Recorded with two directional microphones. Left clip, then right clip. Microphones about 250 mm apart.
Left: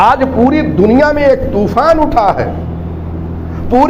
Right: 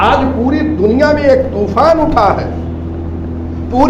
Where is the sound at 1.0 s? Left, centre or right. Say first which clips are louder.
Right 2 dB; left.